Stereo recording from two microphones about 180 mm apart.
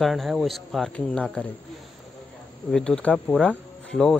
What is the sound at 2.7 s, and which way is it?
Speech, 5° left (ahead or behind).